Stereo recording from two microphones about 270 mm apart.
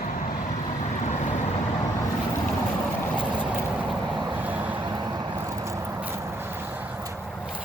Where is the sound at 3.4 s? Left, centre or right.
Centre.